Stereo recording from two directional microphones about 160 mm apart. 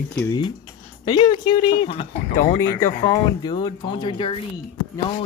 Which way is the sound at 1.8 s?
50° left (ahead or behind).